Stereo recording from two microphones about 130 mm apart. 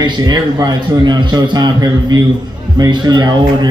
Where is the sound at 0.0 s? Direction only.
35° right (ahead or behind).